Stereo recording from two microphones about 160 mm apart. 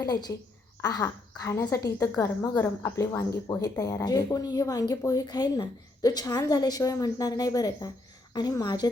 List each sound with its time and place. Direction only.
0.0 s a woman's voice: 25° left (ahead or behind)